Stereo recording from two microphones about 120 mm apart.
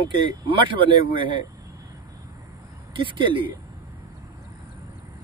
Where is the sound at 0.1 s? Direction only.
45° right (ahead or behind).